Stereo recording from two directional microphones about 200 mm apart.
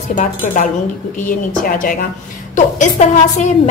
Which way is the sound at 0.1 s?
40° left (ahead or behind).